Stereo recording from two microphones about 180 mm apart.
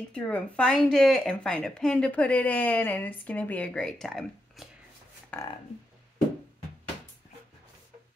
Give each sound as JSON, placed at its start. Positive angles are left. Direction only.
{"t": 0.1, "sound": "a woman's voice", "side_deg": 5}